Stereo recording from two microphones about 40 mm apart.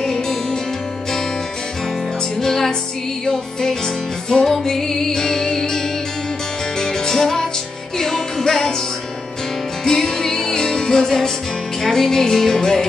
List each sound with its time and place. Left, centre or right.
2.4 s music: centre
4.3 s music: centre
6.8 s music: centre
9.8 s music: centre